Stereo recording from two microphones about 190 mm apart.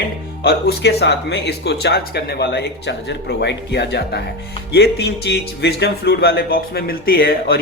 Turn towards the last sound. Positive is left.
turn(degrees=50)  # may be behind; listen again after turning